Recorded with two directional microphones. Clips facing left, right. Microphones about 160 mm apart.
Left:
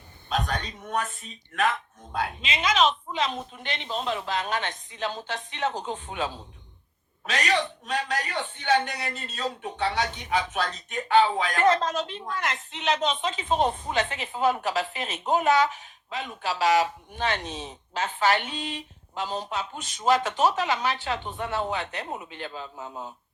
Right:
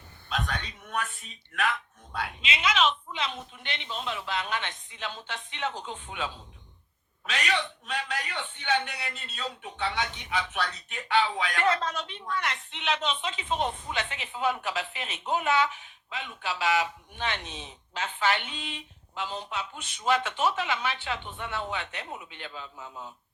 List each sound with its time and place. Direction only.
0.3 s a man's voice: 40° left (ahead or behind)